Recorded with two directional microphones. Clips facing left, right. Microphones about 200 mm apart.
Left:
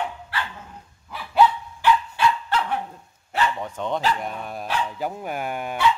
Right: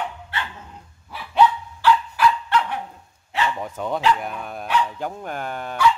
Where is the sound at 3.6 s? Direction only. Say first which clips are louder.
Right 1 dB; 5° right (ahead or behind); by 5.9 s 15° left (ahead or behind).